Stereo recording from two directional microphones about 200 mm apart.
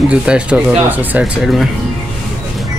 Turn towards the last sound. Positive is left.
turn(degrees=0)  # may be behind; listen again after turning